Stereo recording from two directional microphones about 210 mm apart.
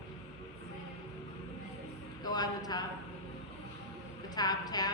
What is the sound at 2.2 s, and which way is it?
Speech, 20° left (ahead or behind).